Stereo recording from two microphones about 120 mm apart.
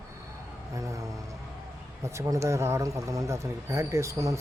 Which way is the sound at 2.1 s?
25° right (ahead or behind).